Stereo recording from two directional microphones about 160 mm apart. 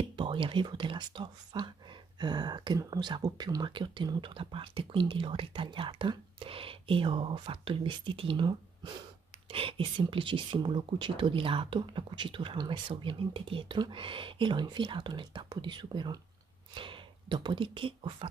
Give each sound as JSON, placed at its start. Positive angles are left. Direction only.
{"t": 0.1, "sound": "speech", "side_deg": -30}